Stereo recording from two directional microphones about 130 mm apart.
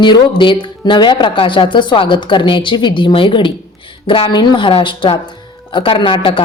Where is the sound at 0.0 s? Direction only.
35° left (ahead or behind).